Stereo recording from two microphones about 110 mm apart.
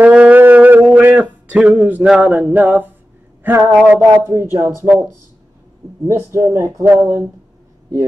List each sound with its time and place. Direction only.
0.0 s a sound: 15° right (ahead or behind)
3.4 s speech: 25° right (ahead or behind)
6.0 s speech: 25° right (ahead or behind)